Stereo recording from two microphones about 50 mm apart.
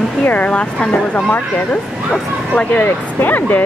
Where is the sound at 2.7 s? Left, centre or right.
Left.